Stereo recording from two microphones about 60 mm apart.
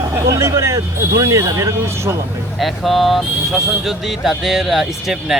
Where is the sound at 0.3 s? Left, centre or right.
Right.